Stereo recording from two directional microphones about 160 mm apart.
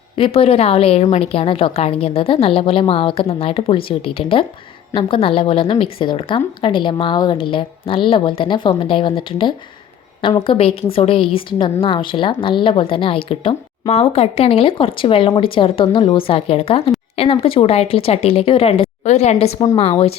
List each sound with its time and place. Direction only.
0.3 s a woman's voice: 40° left (ahead or behind)
19.5 s a woman's voice: 30° left (ahead or behind)